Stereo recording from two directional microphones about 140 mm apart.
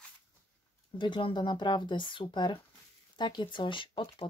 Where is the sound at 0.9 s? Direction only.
35° left (ahead or behind).